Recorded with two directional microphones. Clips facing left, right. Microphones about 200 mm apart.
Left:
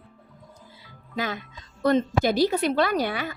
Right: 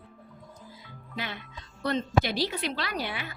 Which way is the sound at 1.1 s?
45° left (ahead or behind).